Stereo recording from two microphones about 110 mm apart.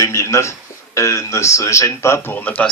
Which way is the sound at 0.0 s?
25° left (ahead or behind).